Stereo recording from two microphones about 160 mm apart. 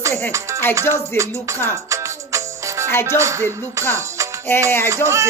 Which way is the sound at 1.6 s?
20° right (ahead or behind).